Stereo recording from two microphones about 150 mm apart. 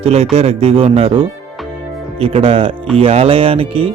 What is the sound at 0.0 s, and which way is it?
Speech, 45° right (ahead or behind).